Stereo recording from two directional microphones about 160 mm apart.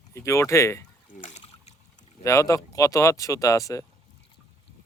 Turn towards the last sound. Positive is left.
turn(degrees=20)  # may be behind; listen again after turning